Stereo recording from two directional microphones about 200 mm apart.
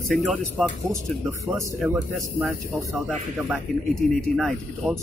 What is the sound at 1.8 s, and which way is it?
Speech, 5° right (ahead or behind).